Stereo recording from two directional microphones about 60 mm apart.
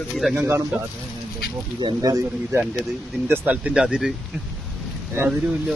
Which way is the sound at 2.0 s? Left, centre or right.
Right.